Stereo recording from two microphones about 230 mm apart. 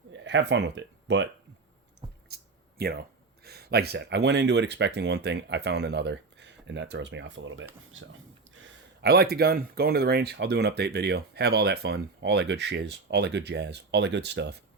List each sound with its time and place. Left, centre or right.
0.1 s speech: right
2.3 s a sound: right
3.4 s speech: right